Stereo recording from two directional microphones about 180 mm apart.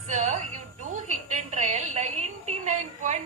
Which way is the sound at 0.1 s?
40° right (ahead or behind).